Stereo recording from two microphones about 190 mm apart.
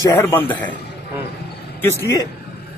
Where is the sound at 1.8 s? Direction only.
15° left (ahead or behind).